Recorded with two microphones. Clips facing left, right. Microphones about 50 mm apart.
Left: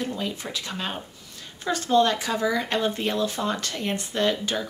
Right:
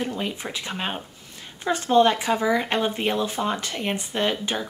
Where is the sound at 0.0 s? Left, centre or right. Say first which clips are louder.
Right 1 dB; right.